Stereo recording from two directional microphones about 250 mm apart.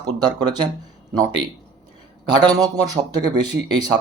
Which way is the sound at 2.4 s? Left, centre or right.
Centre.